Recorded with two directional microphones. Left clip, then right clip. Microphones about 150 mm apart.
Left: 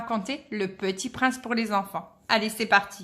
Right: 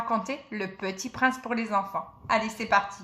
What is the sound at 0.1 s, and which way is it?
A woman's voice, 15° left (ahead or behind).